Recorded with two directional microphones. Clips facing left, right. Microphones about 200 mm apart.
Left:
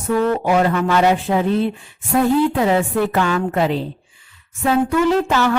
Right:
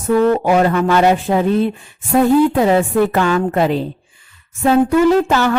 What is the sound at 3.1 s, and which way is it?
A woman's voice, 45° right (ahead or behind).